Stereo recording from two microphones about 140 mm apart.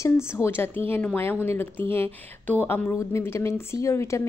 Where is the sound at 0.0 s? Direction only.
20° left (ahead or behind).